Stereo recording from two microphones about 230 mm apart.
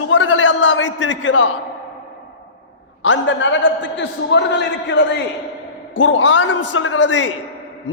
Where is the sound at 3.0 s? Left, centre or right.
Left.